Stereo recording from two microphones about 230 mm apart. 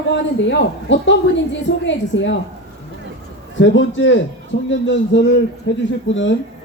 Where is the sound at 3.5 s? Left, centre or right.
Left.